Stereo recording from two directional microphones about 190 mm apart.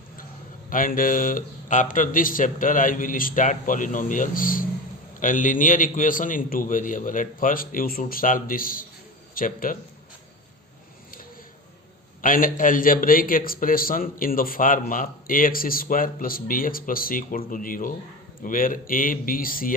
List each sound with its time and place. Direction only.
0.7 s a man's voice: 45° left (ahead or behind)
12.2 s a man's voice: 45° left (ahead or behind)